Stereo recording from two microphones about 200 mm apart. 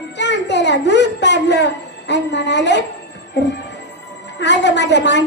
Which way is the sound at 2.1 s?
60° left (ahead or behind).